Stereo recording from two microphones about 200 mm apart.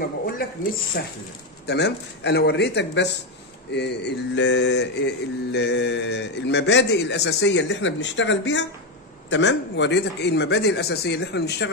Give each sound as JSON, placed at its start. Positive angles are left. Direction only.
{"t": 0.4, "sound": "speech", "side_deg": 45}
{"t": 1.7, "sound": "mantra", "side_deg": 55}